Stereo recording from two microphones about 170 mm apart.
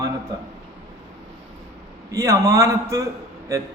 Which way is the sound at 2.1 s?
20° right (ahead or behind).